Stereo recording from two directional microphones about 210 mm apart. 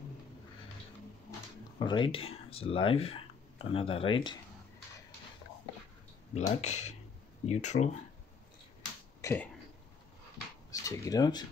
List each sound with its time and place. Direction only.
1.8 s speech: 20° left (ahead or behind)
6.3 s speech: 30° left (ahead or behind)
9.2 s speech: 10° left (ahead or behind)
10.7 s speech: 15° left (ahead or behind)